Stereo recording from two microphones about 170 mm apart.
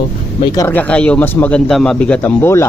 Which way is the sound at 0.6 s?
10° left (ahead or behind).